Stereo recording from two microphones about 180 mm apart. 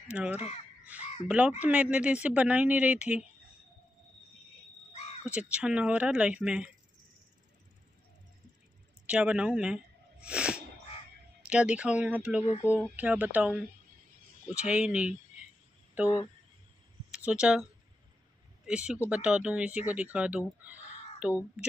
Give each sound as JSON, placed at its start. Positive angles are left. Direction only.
{"t": 0.1, "sound": "speech", "side_deg": -5}
{"t": 4.9, "sound": "crow", "side_deg": 35}
{"t": 5.2, "sound": "speech", "side_deg": -5}
{"t": 9.0, "sound": "speech", "side_deg": -5}
{"t": 10.2, "sound": "sneeze", "side_deg": -5}
{"t": 11.4, "sound": "speech", "side_deg": -5}
{"t": 18.7, "sound": "speech", "side_deg": -5}